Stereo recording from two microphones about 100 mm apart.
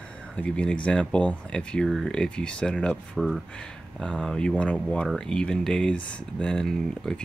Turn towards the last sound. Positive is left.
turn(degrees=5)  # may be behind; listen again after turning